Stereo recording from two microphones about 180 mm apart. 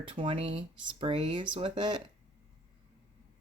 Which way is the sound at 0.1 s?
30° right (ahead or behind).